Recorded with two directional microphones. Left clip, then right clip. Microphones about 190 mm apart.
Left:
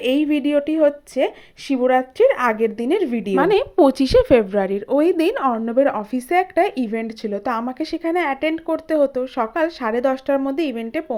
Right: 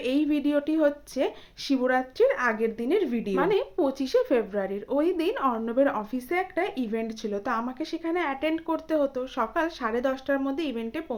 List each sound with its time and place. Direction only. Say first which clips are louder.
0.0 s speech: left 7 dB; 25° left (ahead or behind)